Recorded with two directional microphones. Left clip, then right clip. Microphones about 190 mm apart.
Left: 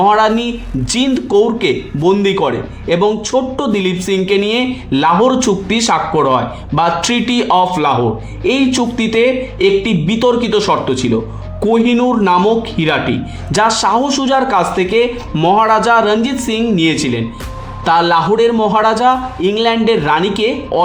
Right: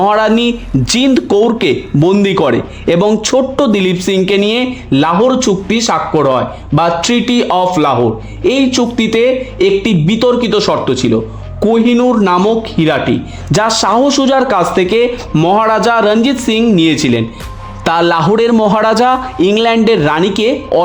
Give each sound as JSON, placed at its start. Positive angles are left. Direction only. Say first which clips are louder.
{"t": 0.0, "sound": "a man's voice", "louder": "right 1 dB", "side_deg": -30}